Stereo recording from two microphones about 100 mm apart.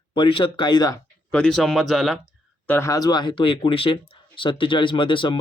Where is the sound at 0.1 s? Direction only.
55° left (ahead or behind).